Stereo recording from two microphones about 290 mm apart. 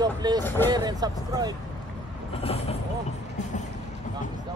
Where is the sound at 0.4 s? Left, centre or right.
Centre.